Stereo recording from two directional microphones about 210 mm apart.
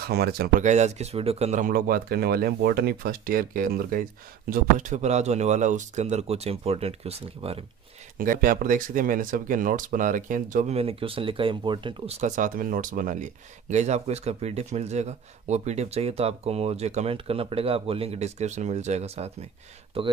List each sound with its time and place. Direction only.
0.0 s speech: 50° right (ahead or behind); by 7.6 s 30° right (ahead or behind)
8.2 s speech: 40° right (ahead or behind); by 20.1 s 25° right (ahead or behind)